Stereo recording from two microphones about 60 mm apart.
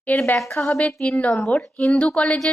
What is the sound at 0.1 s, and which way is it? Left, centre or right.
Speech, left.